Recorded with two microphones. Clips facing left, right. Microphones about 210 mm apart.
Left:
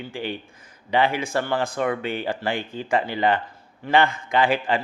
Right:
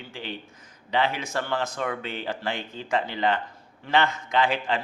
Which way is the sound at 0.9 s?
10° left (ahead or behind).